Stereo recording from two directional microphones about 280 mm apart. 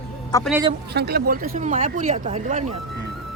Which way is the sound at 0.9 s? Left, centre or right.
Right.